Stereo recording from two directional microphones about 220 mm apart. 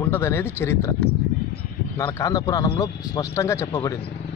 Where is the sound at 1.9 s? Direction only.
15° left (ahead or behind).